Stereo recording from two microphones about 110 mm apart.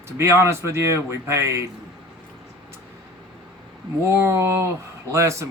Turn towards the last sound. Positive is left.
turn(degrees=-25)  # may be behind; listen again after turning